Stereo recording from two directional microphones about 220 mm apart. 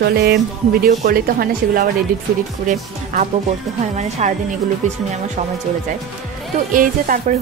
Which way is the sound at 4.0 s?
30° right (ahead or behind).